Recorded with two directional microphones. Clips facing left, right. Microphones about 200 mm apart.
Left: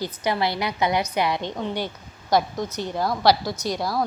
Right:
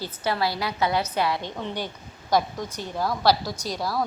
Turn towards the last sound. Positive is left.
turn(degrees=15)  # may be behind; listen again after turning